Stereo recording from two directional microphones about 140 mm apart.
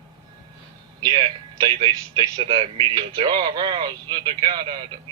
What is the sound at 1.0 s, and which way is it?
Speech, 30° right (ahead or behind).